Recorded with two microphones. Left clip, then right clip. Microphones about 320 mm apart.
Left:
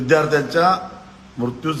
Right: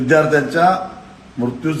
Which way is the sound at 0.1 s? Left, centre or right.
Centre.